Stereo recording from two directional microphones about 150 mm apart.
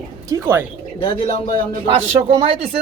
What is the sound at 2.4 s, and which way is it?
Speech, 35° right (ahead or behind).